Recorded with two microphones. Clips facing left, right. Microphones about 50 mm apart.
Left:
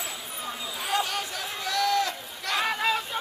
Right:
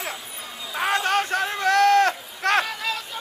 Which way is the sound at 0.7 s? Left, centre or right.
Right.